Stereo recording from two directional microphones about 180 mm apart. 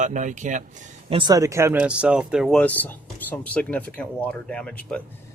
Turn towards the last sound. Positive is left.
turn(degrees=5)  # may be behind; listen again after turning